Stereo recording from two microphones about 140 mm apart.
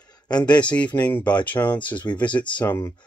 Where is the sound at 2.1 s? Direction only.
25° left (ahead or behind).